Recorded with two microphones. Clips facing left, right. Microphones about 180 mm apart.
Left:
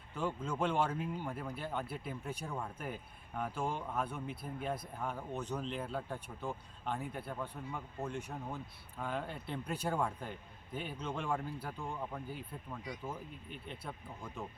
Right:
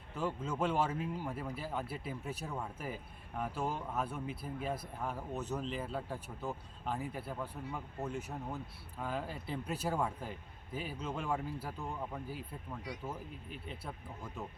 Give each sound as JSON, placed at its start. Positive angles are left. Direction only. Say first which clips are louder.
{"t": 0.1, "sound": "speech", "louder": "even", "side_deg": -5}